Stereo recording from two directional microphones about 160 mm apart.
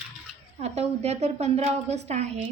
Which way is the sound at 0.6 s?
40° right (ahead or behind).